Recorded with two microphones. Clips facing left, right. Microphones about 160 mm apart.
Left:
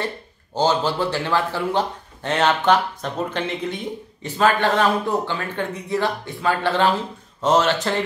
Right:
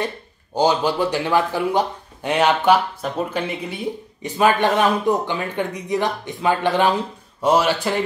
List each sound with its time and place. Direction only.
0.6 s speech: 15° right (ahead or behind)